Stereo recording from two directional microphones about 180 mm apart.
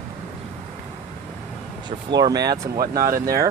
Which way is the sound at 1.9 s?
25° right (ahead or behind).